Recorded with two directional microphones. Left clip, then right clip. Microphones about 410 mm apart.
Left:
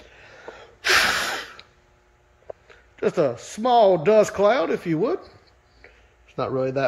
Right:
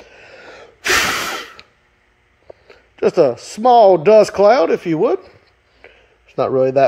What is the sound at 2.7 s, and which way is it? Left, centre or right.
A man's voice, centre.